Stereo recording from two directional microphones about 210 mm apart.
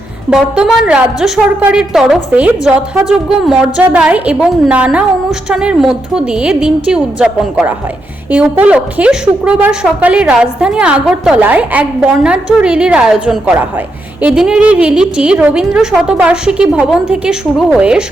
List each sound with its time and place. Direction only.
0.3 s a woman's voice: 5° right (ahead or behind)